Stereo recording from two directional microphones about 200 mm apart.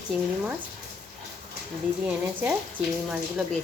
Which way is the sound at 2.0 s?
5° right (ahead or behind).